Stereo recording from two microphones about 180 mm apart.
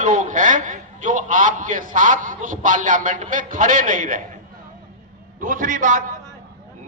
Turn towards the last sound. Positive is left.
turn(degrees=-45)  # may be behind; listen again after turning